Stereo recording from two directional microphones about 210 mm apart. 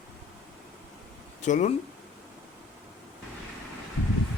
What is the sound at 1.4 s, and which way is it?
Speech, 35° left (ahead or behind).